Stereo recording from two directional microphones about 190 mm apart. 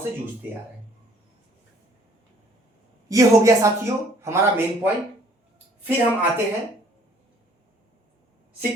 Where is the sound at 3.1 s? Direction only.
15° right (ahead or behind).